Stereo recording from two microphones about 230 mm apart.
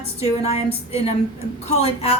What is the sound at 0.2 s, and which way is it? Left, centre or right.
A woman's voice, left.